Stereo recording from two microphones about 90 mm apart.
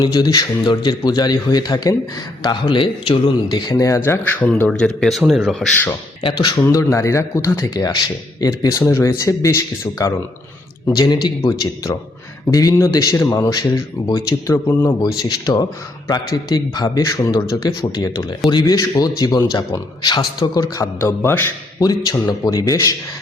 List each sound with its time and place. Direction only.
0.0 s a man's voice: 50° left (ahead or behind)
2.4 s a man's voice: 60° left (ahead or behind); by 4.2 s 30° left (ahead or behind)
4.2 s speech: 15° left (ahead or behind)
4.9 s speech: centre (ahead or behind)
6.7 s speech: 35° left (ahead or behind)
10.9 s a man's voice: 50° left (ahead or behind)
12.5 s speech: 40° left (ahead or behind)
14.8 s a man's voice: 50° left (ahead or behind)
21.0 s a man's voice: 25° left (ahead or behind)
21.8 s speech: 45° left (ahead or behind)